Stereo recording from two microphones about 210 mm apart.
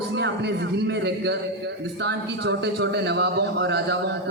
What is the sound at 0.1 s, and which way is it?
A man's voice, 55° right (ahead or behind).